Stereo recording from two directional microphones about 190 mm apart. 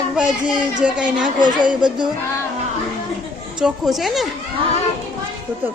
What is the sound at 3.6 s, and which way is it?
Speech, centre (ahead or behind).